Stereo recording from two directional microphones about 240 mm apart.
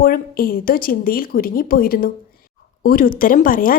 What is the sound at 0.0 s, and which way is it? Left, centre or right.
Speech, left.